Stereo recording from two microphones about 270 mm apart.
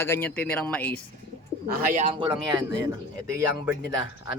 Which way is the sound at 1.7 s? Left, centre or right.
Right.